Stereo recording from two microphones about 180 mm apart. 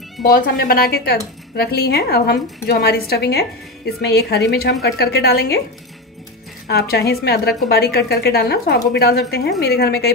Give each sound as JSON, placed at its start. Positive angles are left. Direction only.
{"t": 0.2, "sound": "a woman's voice", "side_deg": 55}
{"t": 6.7, "sound": "a woman's voice", "side_deg": 60}